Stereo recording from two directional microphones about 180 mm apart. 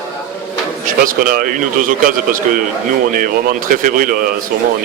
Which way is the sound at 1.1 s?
50° right (ahead or behind).